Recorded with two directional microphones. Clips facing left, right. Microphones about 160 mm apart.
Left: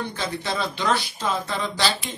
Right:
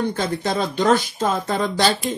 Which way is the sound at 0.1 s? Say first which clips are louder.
Right 6 dB; 45° right (ahead or behind).